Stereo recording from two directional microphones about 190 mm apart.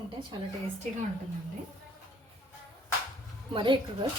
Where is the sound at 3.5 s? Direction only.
25° right (ahead or behind).